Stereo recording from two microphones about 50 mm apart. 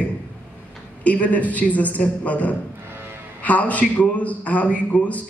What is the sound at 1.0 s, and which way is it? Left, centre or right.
A man's voice, left.